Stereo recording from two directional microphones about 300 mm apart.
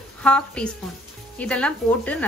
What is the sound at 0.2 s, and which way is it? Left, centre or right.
A woman's voice, centre.